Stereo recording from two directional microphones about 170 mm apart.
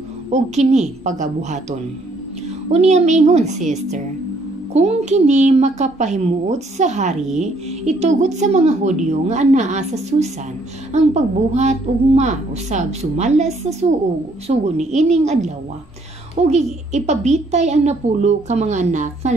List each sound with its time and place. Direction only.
0.3 s a child's voice: 40° right (ahead or behind)